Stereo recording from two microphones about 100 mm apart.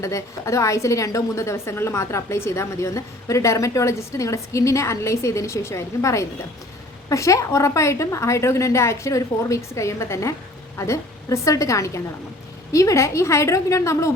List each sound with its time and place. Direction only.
0.0 s a woman's voice: 30° left (ahead or behind)